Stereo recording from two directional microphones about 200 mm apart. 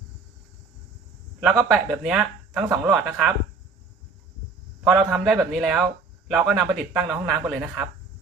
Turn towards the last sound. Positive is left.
turn(degrees=0)  # may be behind; listen again after turning